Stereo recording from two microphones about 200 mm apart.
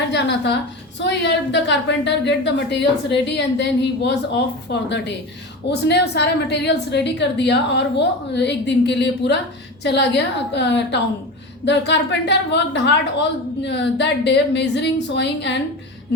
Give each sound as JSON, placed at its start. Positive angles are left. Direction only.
{"t": 0.1, "sound": "a woman's voice", "side_deg": 60}